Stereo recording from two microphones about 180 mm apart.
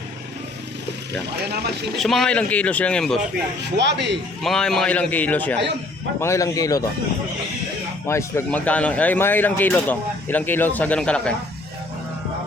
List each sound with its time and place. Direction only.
2.0 s speech: centre (ahead or behind)
3.8 s speech: 75° right (ahead or behind)
4.4 s speech: 5° left (ahead or behind); by 6.8 s 20° left (ahead or behind)
8.0 s speech: 15° left (ahead or behind)